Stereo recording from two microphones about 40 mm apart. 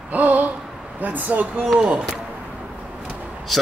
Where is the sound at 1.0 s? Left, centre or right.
Right.